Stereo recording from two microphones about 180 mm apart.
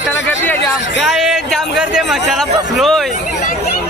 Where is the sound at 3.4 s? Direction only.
60° left (ahead or behind).